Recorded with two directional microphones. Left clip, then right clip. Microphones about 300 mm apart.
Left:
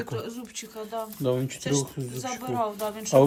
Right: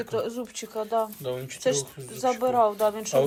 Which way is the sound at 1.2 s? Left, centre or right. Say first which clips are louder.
Left 5 dB; left.